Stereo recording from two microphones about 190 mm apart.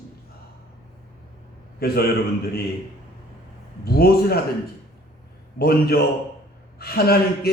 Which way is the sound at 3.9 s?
55° left (ahead or behind).